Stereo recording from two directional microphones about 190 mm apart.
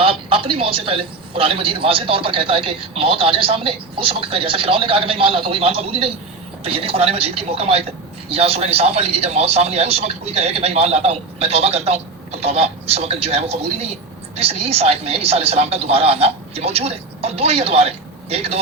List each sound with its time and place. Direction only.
0.0 s a man's voice: 30° right (ahead or behind)